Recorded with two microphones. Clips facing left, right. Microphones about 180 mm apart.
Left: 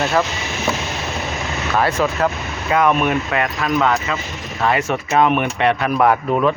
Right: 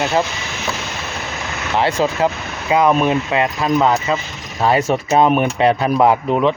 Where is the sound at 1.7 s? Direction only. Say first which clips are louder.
Right 1 dB; 30° right (ahead or behind).